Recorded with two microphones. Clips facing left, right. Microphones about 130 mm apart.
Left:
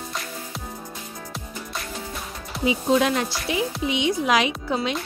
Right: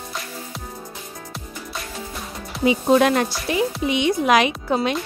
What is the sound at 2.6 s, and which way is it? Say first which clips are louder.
Speech: right 4 dB; 55° right (ahead or behind).